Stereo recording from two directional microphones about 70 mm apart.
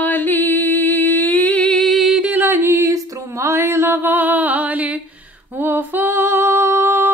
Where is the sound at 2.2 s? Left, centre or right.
Right.